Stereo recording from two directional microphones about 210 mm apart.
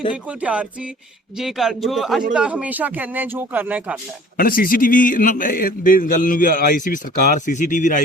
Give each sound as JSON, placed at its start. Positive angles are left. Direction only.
{"t": 0.1, "sound": "speech", "side_deg": -5}
{"t": 4.4, "sound": "a man's voice", "side_deg": 45}